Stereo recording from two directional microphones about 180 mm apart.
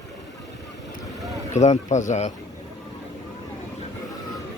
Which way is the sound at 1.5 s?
40° left (ahead or behind).